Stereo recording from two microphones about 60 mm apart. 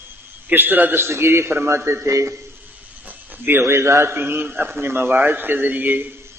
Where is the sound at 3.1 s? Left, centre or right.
Right.